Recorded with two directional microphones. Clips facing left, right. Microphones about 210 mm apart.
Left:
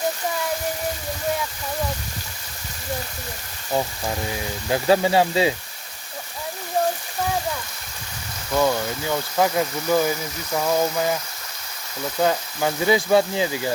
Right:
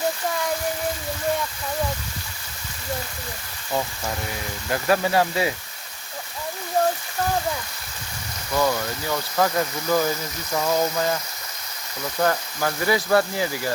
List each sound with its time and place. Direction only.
4.7 s speech: 20° left (ahead or behind)
8.5 s speech: 15° left (ahead or behind)
12.2 s speech: 15° left (ahead or behind)